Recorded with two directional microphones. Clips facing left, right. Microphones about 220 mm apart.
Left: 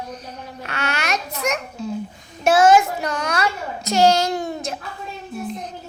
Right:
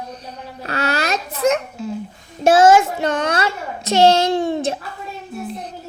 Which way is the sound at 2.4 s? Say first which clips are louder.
Right 2 dB; 30° right (ahead or behind).